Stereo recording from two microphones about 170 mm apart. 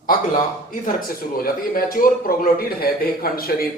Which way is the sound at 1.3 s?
60° left (ahead or behind).